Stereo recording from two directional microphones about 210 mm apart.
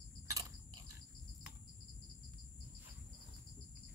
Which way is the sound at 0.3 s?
15° right (ahead or behind).